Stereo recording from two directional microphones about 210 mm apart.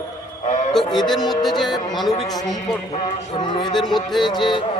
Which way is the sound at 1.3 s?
Centre (ahead or behind).